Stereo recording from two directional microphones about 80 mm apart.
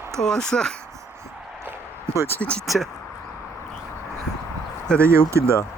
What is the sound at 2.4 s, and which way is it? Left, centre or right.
Speech, centre.